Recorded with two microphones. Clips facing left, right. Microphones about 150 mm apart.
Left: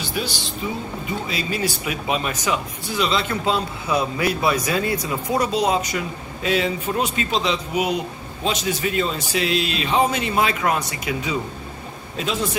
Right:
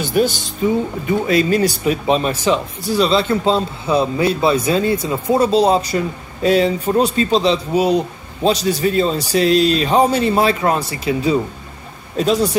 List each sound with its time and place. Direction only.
0.0 s speech: 45° right (ahead or behind)